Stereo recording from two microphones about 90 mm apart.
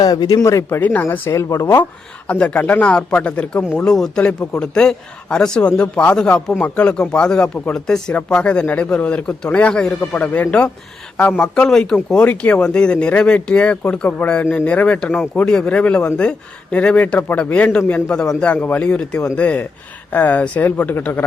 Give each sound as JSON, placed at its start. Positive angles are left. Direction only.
{"t": 0.0, "sound": "speech", "side_deg": 50}
{"t": 0.4, "sound": "speech", "side_deg": 30}
{"t": 0.8, "sound": "speech", "side_deg": 20}
{"t": 1.3, "sound": "speech", "side_deg": 35}
{"t": 2.2, "sound": "a man's voice", "side_deg": 15}